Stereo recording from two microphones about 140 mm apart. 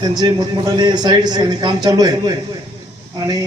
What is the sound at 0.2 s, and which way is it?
A man's voice, 30° right (ahead or behind).